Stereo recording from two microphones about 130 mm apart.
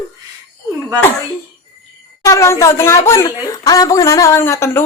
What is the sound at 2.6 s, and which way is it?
Speech, 20° left (ahead or behind).